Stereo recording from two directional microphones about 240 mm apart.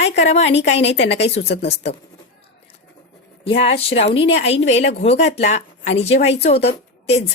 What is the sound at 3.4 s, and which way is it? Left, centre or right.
A woman's voice, left.